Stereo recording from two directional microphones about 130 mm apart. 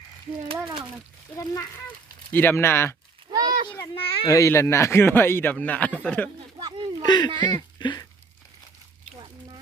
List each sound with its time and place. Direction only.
0.4 s speech: 45° right (ahead or behind)
1.4 s speech: 20° left (ahead or behind)
3.3 s a sound: 30° right (ahead or behind)
4.3 s a man's voice: 20° left (ahead or behind)
6.6 s a sound: 35° right (ahead or behind)
7.0 s speech: 35° left (ahead or behind)